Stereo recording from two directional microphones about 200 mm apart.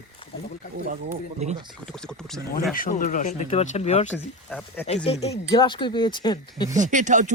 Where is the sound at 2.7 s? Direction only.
45° left (ahead or behind).